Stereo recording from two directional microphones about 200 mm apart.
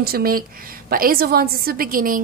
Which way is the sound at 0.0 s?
50° right (ahead or behind).